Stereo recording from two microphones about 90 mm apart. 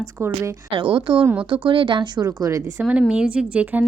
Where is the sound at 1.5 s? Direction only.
70° right (ahead or behind); by 2.7 s 40° right (ahead or behind).